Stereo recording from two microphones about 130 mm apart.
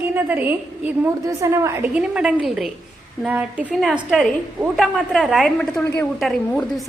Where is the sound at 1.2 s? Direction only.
25° right (ahead or behind).